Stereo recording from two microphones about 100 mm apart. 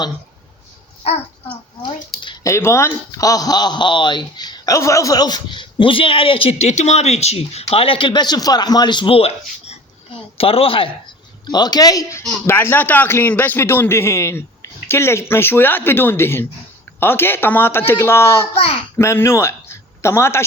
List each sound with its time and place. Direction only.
2.4 s speech: 30° left (ahead or behind); by 9.1 s 50° left (ahead or behind)
9.1 s speech: 90° left
10.3 s speech: 75° left (ahead or behind)
11.4 s speech: 45° left (ahead or behind)
12.5 s speech: 20° left (ahead or behind)
18.5 s speech: 70° left (ahead or behind)
18.9 s a man's voice: 25° left (ahead or behind)